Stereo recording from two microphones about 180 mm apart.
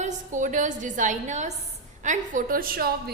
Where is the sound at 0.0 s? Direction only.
45° right (ahead or behind).